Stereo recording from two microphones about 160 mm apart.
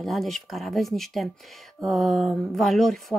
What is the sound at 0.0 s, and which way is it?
Speech, centre (ahead or behind).